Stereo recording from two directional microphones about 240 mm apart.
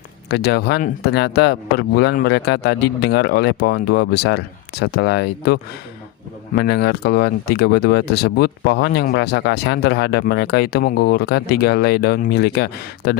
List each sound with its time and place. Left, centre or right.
0.3 s speech: left